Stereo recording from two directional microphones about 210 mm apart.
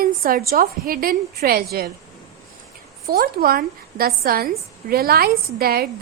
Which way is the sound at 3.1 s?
45° right (ahead or behind).